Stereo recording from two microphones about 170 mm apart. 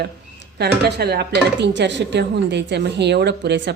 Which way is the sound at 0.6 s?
75° right (ahead or behind).